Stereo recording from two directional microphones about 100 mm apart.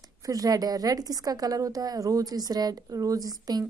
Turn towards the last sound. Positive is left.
turn(degrees=-40)  # may be behind; listen again after turning